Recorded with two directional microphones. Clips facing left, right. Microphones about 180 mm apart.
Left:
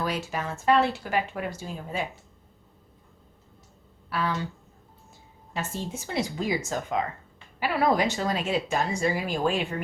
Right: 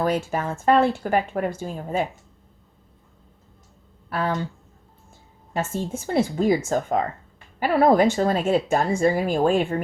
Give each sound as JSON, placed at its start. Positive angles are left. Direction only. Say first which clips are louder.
{"t": 0.0, "sound": "speech", "louder": "right 7 dB", "side_deg": -50}
{"t": 4.1, "sound": "speech", "louder": "right 4 dB", "side_deg": -50}
{"t": 5.5, "sound": "speech", "louder": "right 6 dB", "side_deg": -50}